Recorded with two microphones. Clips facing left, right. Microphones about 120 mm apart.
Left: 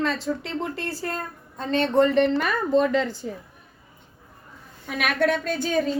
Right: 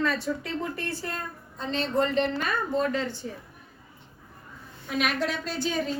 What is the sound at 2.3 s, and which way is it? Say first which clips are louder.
Speech: left 6 dB; 90° left.